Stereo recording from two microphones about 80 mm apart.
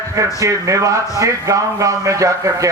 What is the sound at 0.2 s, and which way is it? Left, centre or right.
A man's voice, right.